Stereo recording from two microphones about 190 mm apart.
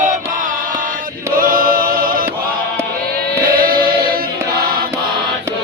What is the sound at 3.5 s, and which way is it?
Choir, 50° right (ahead or behind).